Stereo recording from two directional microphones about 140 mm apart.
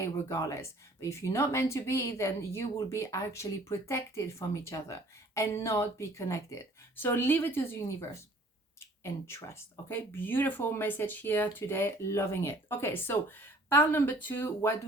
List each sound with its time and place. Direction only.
0.0 s speech: 20° left (ahead or behind)